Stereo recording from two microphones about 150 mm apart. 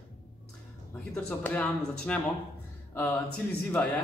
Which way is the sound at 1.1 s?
10° left (ahead or behind).